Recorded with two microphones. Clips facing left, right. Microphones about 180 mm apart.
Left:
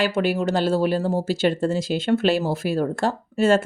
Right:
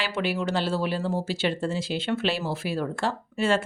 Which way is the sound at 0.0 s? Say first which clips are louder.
Left 6 dB; 45° left (ahead or behind).